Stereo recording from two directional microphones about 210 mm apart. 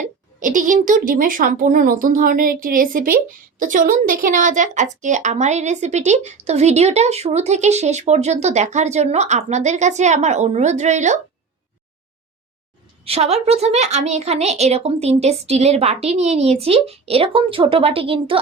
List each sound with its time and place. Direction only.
0.0 s a woman's voice: 40° right (ahead or behind)
13.1 s a woman's voice: 30° right (ahead or behind)